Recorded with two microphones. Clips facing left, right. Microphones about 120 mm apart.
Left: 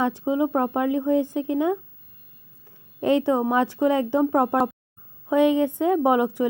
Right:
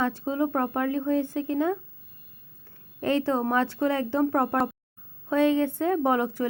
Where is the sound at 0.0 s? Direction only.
15° left (ahead or behind).